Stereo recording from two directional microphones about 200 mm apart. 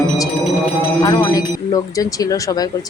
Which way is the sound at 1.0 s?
20° left (ahead or behind).